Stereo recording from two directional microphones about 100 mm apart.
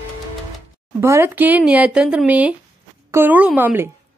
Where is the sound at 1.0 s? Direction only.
25° right (ahead or behind).